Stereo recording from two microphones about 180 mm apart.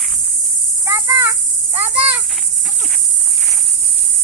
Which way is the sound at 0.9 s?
15° right (ahead or behind).